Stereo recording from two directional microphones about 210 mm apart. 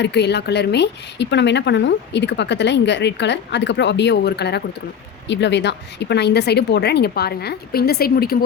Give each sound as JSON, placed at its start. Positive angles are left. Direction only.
{"t": 0.0, "sound": "a woman's voice", "side_deg": 55}